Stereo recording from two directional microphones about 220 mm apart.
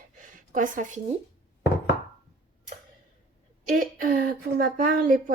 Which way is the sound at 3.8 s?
40° right (ahead or behind).